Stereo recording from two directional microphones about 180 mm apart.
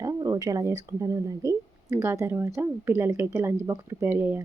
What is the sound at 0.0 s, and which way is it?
Speech, 20° right (ahead or behind).